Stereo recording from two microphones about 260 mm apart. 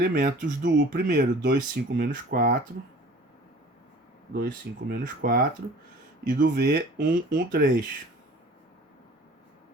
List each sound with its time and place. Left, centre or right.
0.0 s speech: right
4.4 s speech: right